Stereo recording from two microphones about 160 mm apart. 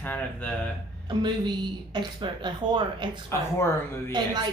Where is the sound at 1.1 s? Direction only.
25° right (ahead or behind).